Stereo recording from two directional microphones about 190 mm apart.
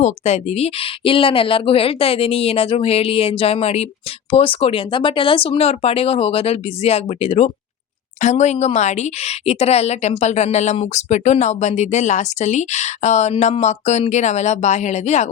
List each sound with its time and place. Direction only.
0.0 s speech: 35° left (ahead or behind)